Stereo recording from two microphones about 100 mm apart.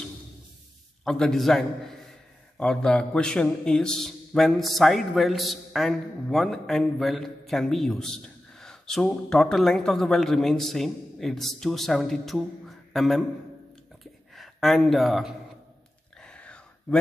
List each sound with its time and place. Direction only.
1.0 s a man's voice: 5° left (ahead or behind)
14.3 s speech: centre (ahead or behind)
16.2 s whispering: 10° left (ahead or behind)